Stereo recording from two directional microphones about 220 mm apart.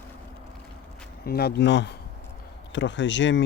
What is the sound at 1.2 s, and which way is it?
Speech, 45° left (ahead or behind).